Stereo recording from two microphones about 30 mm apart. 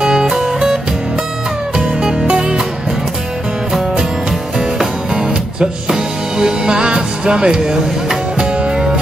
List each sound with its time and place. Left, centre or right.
0.0 s music: right
1.8 s music: centre
2.2 s music: right
4.6 s music: right